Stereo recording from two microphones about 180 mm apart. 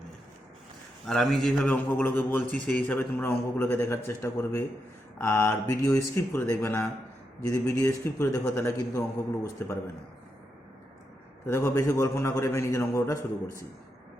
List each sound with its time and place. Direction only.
1.0 s a man's voice: centre (ahead or behind); by 9.7 s 15° left (ahead or behind)
11.4 s a man's voice: 15° left (ahead or behind)